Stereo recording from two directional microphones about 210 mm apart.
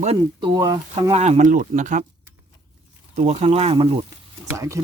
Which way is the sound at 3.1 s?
30° right (ahead or behind).